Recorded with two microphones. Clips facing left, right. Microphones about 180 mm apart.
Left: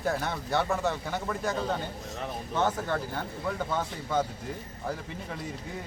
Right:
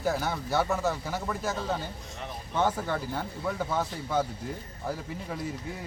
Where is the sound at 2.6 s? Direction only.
10° right (ahead or behind).